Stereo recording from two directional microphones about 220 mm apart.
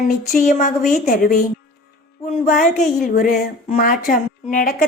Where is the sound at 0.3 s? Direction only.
35° left (ahead or behind).